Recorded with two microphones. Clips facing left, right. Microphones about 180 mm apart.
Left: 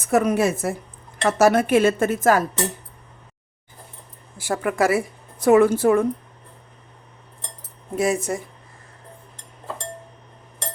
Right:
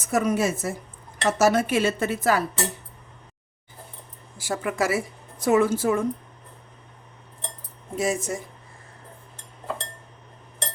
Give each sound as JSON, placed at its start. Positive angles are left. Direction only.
{"t": 0.1, "sound": "a woman's voice", "side_deg": 60}
{"t": 4.4, "sound": "a woman's voice", "side_deg": 60}
{"t": 7.9, "sound": "a woman's voice", "side_deg": 60}